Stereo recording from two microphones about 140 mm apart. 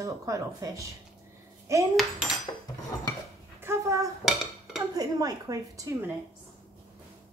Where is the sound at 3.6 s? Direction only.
20° right (ahead or behind).